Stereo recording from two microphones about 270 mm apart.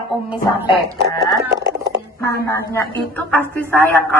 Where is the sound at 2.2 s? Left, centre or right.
Centre.